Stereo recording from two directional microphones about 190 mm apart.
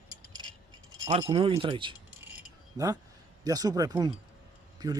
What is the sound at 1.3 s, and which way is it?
Speech, 30° right (ahead or behind).